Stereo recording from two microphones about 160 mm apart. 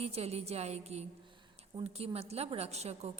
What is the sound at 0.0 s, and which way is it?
A woman's voice, 40° right (ahead or behind).